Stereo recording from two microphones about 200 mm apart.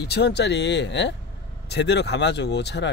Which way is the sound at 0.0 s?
55° left (ahead or behind).